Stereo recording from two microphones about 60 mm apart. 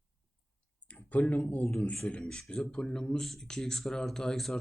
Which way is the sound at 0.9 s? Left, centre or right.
Left.